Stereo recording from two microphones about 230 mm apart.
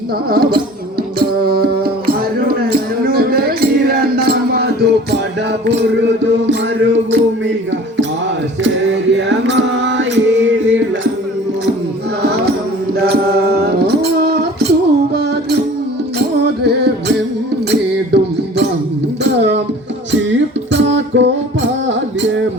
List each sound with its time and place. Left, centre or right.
0.3 s music: right
8.6 s mantra: right
12.2 s music: right
17.7 s music: right
20.7 s music: right